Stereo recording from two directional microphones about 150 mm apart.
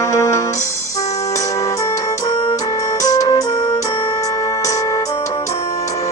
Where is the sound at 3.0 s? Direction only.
25° left (ahead or behind).